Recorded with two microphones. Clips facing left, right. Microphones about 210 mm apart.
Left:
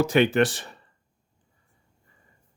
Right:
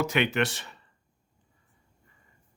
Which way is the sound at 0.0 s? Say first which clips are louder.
Left 6 dB; 30° left (ahead or behind).